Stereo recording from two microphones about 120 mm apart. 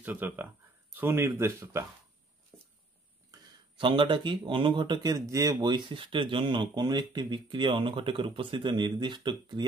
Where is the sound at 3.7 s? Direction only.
45° right (ahead or behind).